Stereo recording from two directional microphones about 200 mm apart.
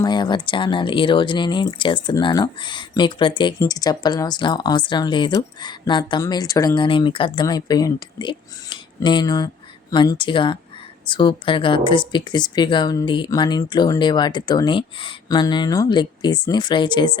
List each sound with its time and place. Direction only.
0.0 s speech: 20° left (ahead or behind)